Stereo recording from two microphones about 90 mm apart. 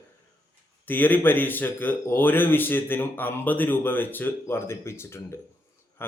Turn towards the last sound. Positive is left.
turn(degrees=25)  # may be behind; listen again after turning